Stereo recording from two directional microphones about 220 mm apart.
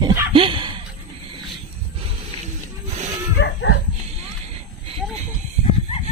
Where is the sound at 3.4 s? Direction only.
55° left (ahead or behind).